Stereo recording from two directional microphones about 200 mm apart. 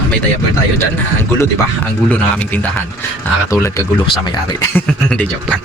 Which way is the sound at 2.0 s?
10° left (ahead or behind).